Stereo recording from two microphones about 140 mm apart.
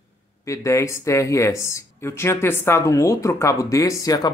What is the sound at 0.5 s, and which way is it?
Speech, 20° left (ahead or behind).